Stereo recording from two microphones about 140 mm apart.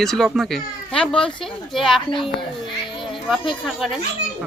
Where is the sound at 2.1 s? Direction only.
40° left (ahead or behind).